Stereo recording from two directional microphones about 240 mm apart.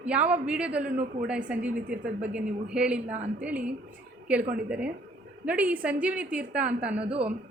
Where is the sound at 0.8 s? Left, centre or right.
Right.